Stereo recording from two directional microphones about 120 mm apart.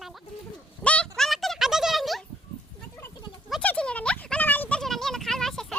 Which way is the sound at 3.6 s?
10° left (ahead or behind).